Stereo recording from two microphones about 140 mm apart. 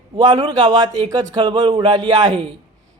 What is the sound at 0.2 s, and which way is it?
Speech, 30° right (ahead or behind).